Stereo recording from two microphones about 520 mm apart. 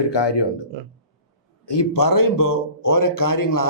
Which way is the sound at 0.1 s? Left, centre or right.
Left.